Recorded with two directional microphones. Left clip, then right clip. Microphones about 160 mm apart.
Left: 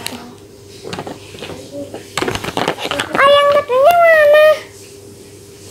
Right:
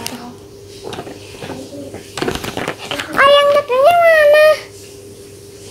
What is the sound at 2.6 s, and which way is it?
Dog, 15° left (ahead or behind).